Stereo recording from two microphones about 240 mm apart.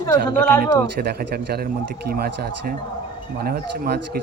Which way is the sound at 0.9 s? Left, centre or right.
Right.